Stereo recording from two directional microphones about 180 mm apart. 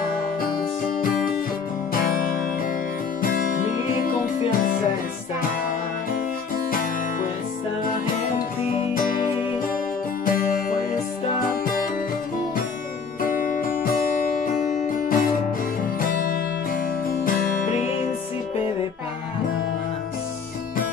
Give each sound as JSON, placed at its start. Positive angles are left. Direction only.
{"t": 0.8, "sound": "music", "side_deg": 50}
{"t": 10.3, "sound": "music", "side_deg": 50}
{"t": 13.2, "sound": "music", "side_deg": 50}
{"t": 17.7, "sound": "music", "side_deg": 35}